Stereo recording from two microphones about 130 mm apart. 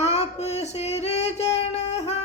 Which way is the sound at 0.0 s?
55° left (ahead or behind).